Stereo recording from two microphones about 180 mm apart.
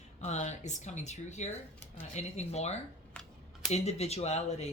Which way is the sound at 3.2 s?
5° left (ahead or behind).